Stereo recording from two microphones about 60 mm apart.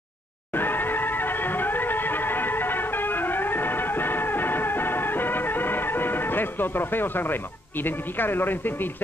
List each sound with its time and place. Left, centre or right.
0.6 s music: left
7.8 s speech: left